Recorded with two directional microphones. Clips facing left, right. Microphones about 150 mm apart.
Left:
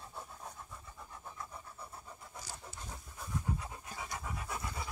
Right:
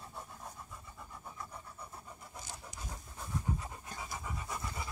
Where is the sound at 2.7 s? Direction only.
15° right (ahead or behind).